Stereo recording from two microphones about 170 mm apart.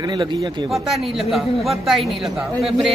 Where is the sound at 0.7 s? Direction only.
Centre (ahead or behind).